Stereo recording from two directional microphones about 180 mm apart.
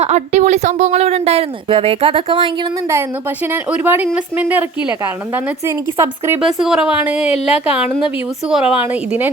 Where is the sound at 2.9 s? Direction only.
10° right (ahead or behind).